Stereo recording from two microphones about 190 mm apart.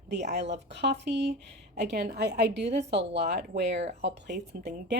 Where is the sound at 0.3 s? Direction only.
65° right (ahead or behind).